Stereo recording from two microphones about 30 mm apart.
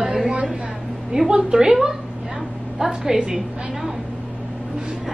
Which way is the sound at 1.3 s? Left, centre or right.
Right.